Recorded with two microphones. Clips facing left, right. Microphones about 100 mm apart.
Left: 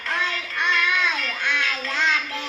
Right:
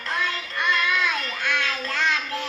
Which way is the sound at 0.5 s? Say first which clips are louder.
Even; 20° left (ahead or behind).